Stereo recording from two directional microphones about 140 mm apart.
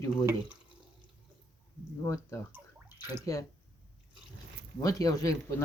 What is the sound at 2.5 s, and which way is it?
Bathtub, 15° right (ahead or behind).